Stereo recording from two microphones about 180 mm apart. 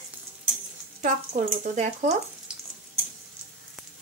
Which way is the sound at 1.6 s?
40° right (ahead or behind).